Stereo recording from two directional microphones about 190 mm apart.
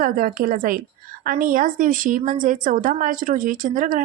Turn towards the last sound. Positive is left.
turn(degrees=-45)  # may be behind; listen again after turning